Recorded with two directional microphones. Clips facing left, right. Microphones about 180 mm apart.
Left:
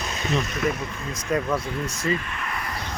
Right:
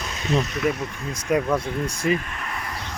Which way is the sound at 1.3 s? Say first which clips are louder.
Right 3 dB; 15° right (ahead or behind).